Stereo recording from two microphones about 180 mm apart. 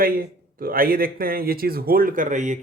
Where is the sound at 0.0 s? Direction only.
55° right (ahead or behind).